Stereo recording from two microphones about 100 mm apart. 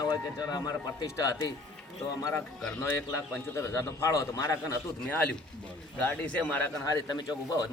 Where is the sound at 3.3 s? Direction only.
30° left (ahead or behind).